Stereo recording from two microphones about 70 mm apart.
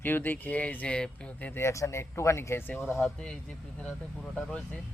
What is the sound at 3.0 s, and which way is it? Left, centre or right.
Speech, centre.